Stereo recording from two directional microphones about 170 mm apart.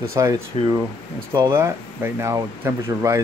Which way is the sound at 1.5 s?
15° right (ahead or behind).